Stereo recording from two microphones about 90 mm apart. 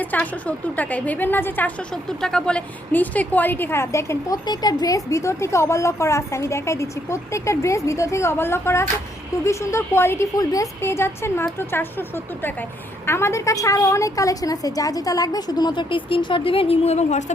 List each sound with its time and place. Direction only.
0.0 s a woman's voice: 20° left (ahead or behind)
1.9 s a woman's voice: 5° left (ahead or behind); by 4.4 s 30° left (ahead or behind)
4.4 s a woman's voice: 50° left (ahead or behind); by 10.2 s 30° left (ahead or behind)
10.3 s a woman's voice: 40° left (ahead or behind)
10.8 s a woman's voice: 30° left (ahead or behind); by 16.8 s 90° left